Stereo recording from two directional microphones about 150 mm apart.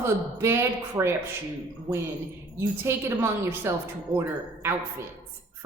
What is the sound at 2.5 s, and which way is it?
A woman's voice, 15° right (ahead or behind).